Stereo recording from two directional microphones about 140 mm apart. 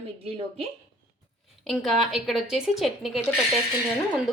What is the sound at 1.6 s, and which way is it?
Speech, centre (ahead or behind).